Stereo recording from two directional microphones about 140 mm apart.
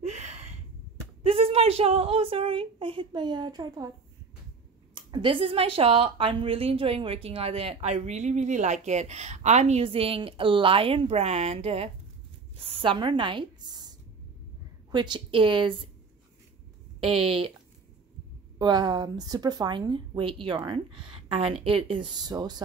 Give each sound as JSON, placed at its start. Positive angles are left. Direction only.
{"t": 0.0, "sound": "a sound", "side_deg": -55}
{"t": 1.2, "sound": "a woman's voice", "side_deg": -45}
{"t": 4.9, "sound": "a woman's voice", "side_deg": -35}
{"t": 17.0, "sound": "a woman's voice", "side_deg": -40}
{"t": 18.6, "sound": "a woman's voice", "side_deg": -30}